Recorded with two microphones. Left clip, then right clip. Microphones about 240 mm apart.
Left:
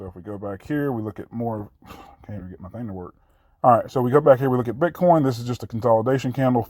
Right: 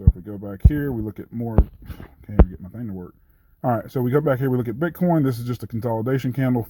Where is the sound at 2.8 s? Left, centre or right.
Left.